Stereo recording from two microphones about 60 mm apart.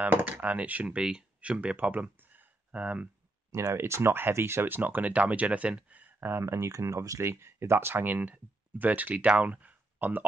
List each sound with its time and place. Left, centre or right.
0.0 s speech: right
0.8 s speech: centre
3.7 s speech: right
6.4 s speech: right
7.2 s speech: right
9.4 s a sound: right